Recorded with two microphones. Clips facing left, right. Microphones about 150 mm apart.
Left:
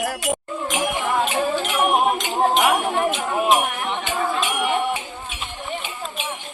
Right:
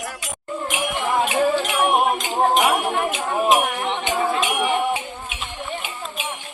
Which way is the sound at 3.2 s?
5° left (ahead or behind).